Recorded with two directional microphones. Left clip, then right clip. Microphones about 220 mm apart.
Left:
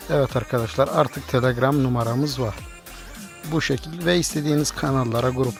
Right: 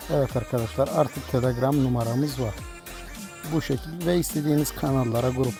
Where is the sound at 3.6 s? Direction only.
5° left (ahead or behind).